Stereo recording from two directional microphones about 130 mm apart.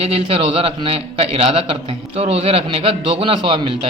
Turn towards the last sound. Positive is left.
turn(degrees=-40)  # may be behind; listen again after turning